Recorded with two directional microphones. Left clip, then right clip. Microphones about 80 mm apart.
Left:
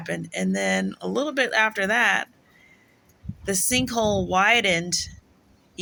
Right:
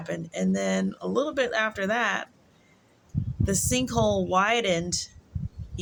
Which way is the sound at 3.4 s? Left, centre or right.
Right.